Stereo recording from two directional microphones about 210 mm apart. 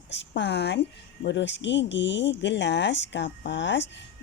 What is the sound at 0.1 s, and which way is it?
A woman's voice, 55° left (ahead or behind).